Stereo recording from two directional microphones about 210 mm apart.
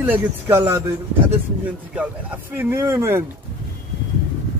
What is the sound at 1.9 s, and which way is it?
Speech, 5° right (ahead or behind).